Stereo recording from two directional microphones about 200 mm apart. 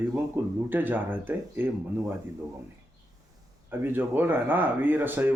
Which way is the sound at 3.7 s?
10° right (ahead or behind).